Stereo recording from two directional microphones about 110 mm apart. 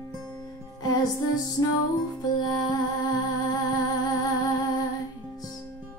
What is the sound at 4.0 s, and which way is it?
Music, 35° left (ahead or behind).